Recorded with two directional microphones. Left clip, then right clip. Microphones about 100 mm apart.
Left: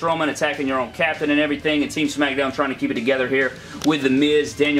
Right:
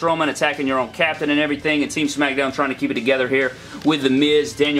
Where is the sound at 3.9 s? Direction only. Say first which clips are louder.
Right 1 dB; centre (ahead or behind).